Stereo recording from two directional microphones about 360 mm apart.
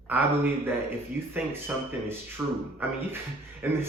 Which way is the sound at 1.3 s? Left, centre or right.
Centre.